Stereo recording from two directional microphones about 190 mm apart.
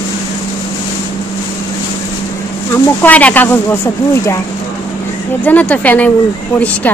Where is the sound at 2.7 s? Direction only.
10° left (ahead or behind).